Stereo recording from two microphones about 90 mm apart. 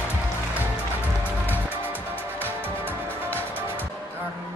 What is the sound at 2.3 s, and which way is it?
Music, 25° right (ahead or behind).